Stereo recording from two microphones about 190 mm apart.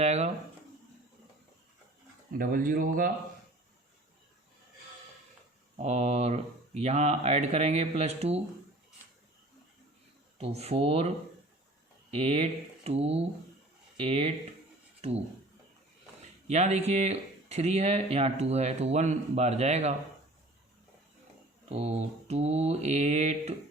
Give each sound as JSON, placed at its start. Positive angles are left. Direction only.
{"t": 0.0, "sound": "speech", "side_deg": -35}
{"t": 2.4, "sound": "speech", "side_deg": -45}
{"t": 5.7, "sound": "speech", "side_deg": -35}
{"t": 10.3, "sound": "speech", "side_deg": -35}
{"t": 12.1, "sound": "speech", "side_deg": -35}
{"t": 16.5, "sound": "speech", "side_deg": -35}
{"t": 21.7, "sound": "speech", "side_deg": -35}